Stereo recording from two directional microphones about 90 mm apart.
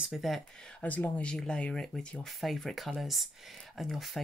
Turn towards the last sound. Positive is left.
turn(degrees=0)  # may be behind; listen again after turning